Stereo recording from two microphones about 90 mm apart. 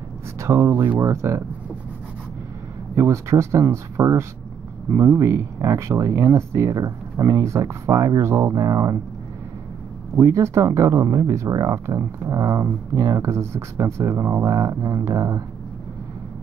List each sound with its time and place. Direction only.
0.4 s speech: 30° right (ahead or behind)
3.0 s speech: 30° right (ahead or behind)
4.9 s speech: 20° right (ahead or behind)
5.2 s speech: 35° right (ahead or behind)
10.1 s speech: 30° right (ahead or behind)